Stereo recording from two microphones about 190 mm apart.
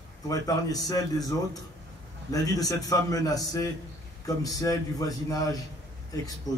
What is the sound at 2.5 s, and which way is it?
A man's voice, 20° left (ahead or behind).